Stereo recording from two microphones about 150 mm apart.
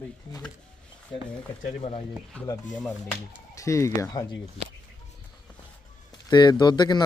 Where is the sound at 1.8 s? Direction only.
40° left (ahead or behind).